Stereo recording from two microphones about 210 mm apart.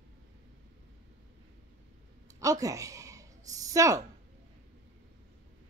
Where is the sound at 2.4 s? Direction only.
15° right (ahead or behind).